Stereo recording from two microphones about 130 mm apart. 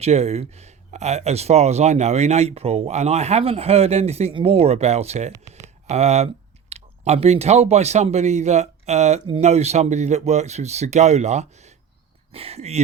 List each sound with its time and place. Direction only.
0.0 s speech: 55° right (ahead or behind)
12.3 s speech: 50° right (ahead or behind)